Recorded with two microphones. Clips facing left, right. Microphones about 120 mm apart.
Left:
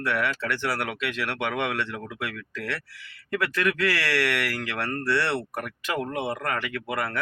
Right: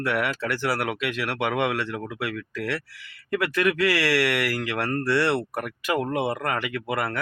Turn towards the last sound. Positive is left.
turn(degrees=-10)  # may be behind; listen again after turning